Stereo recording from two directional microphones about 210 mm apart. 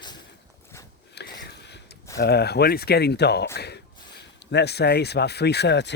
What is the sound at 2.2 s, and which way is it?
Speech, 50° left (ahead or behind).